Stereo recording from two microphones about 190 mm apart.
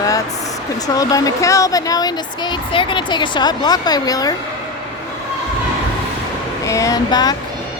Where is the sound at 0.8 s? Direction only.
20° left (ahead or behind).